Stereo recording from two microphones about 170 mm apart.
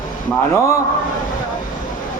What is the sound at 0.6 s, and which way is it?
Music, 15° left (ahead or behind).